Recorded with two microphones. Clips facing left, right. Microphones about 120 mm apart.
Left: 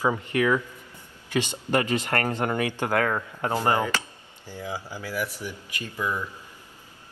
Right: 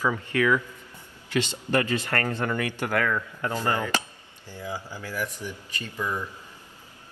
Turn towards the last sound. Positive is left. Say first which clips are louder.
# left 1 dB
turn(degrees=15)  # may be behind; listen again after turning